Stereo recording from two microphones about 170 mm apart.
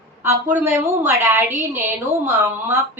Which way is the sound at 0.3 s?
15° right (ahead or behind).